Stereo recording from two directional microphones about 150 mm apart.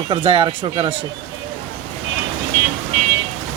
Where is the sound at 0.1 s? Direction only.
35° right (ahead or behind).